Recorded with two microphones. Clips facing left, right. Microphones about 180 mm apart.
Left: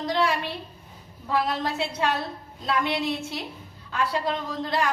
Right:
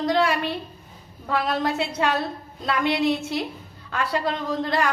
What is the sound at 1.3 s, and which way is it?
Speech, 70° right (ahead or behind).